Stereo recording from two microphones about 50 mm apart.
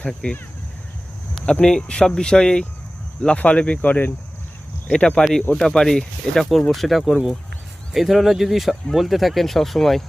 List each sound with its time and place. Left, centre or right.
0.0 s speech: centre
1.6 s speech: centre; by 4.1 s left
4.9 s speech: centre